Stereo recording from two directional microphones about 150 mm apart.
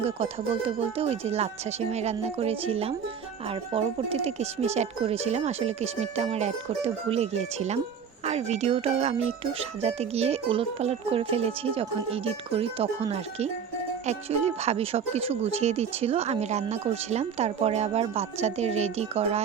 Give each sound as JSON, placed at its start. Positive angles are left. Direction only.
{"t": 0.0, "sound": "speech", "side_deg": -45}